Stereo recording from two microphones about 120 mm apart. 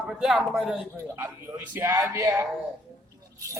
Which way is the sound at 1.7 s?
25° right (ahead or behind).